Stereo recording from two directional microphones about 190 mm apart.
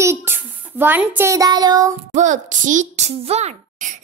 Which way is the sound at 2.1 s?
40° right (ahead or behind).